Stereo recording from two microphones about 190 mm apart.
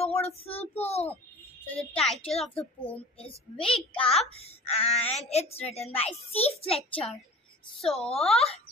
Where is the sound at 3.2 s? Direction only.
30° left (ahead or behind).